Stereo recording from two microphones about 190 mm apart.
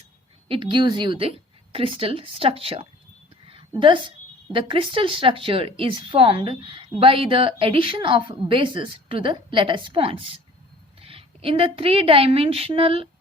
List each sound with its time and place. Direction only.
0.4 s speech: 25° right (ahead or behind)
3.4 s a sound: 25° right (ahead or behind)
4.5 s a woman's voice: 25° right (ahead or behind)